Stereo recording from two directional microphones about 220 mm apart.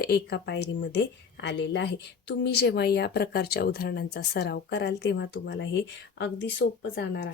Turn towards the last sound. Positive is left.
turn(degrees=55)  # may be behind; listen again after turning